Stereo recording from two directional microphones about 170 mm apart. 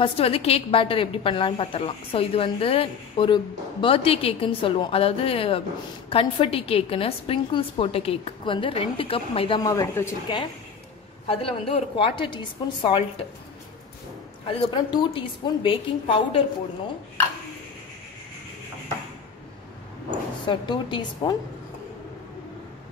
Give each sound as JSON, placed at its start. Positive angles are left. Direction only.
{"t": 0.0, "sound": "a woman's voice", "side_deg": 35}
{"t": 9.6, "sound": "a woman's voice", "side_deg": 20}
{"t": 10.2, "sound": "a woman's voice", "side_deg": 30}
{"t": 14.4, "sound": "a woman's voice", "side_deg": 30}
{"t": 20.4, "sound": "a woman's voice", "side_deg": 30}